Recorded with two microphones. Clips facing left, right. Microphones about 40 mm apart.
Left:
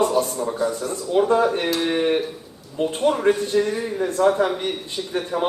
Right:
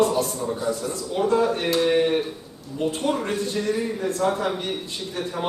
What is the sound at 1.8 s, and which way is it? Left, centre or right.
Speech, centre.